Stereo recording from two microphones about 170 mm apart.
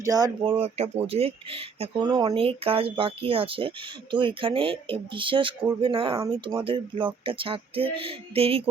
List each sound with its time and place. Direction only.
0.0 s speech: 20° right (ahead or behind)
1.0 s speech: 35° right (ahead or behind)
6.1 s speech: 20° right (ahead or behind)
6.7 s speech: 30° right (ahead or behind)